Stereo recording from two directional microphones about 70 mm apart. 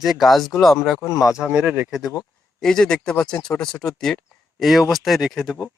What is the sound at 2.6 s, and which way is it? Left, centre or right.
Speech, centre.